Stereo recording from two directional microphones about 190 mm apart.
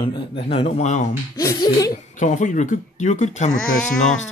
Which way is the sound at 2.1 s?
40° left (ahead or behind).